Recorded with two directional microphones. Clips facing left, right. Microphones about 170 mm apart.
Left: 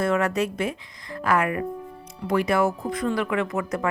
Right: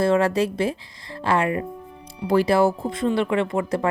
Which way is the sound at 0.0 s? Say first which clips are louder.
Right 4 dB; 30° right (ahead or behind).